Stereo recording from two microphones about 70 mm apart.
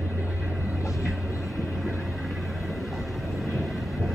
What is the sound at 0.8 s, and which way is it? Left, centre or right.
Vehicle, left.